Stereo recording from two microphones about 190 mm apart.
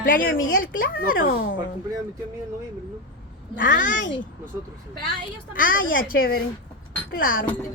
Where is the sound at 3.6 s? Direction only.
45° left (ahead or behind).